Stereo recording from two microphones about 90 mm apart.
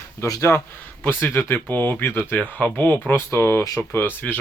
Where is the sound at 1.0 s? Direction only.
20° left (ahead or behind).